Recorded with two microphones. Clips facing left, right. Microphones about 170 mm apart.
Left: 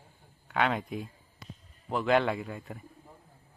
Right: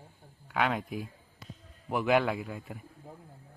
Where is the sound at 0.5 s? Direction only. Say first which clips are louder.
Left 1 dB; 5° right (ahead or behind).